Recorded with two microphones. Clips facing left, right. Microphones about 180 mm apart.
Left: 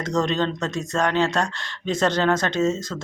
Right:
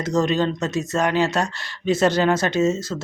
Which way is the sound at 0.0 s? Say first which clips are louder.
Right 2 dB; 5° right (ahead or behind).